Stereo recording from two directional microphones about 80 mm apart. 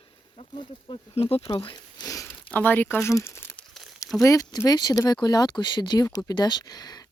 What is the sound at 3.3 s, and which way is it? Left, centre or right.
Crumpling, left.